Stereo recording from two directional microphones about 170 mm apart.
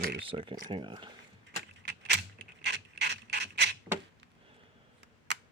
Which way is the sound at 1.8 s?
90° right.